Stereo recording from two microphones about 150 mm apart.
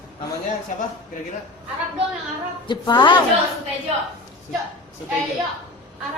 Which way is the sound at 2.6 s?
30° left (ahead or behind).